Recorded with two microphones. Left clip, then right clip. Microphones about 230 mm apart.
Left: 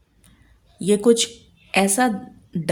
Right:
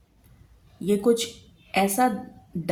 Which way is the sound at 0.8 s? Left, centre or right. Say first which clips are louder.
Left 5 dB; left.